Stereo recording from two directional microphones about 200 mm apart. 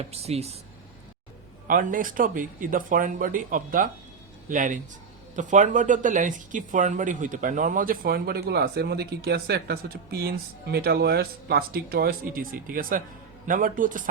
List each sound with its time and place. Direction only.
0.0 s speech: 30° right (ahead or behind)
1.6 s speech: 40° right (ahead or behind)